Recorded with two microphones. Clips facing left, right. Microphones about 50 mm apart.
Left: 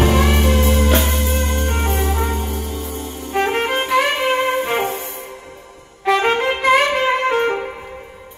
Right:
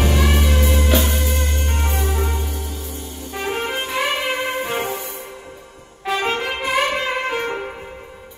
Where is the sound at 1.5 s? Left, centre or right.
Left.